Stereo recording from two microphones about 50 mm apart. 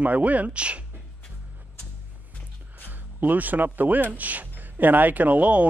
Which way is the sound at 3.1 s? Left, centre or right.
Right.